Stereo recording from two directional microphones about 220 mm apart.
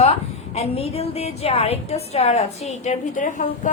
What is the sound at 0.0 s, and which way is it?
A woman's voice, 30° left (ahead or behind).